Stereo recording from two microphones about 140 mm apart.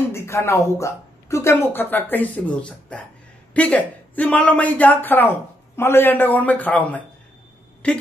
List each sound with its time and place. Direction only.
0.1 s a man's voice: 20° left (ahead or behind)